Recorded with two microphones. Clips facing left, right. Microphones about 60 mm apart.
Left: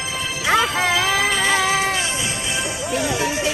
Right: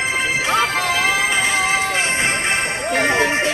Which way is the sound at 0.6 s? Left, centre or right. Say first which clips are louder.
Right 1 dB; right.